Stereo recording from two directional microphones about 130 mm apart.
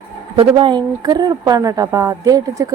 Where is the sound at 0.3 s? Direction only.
35° right (ahead or behind).